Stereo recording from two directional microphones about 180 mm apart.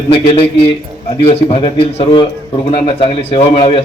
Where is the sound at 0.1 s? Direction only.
30° left (ahead or behind).